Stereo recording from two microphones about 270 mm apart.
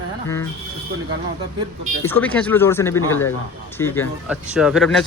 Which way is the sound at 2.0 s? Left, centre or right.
Centre.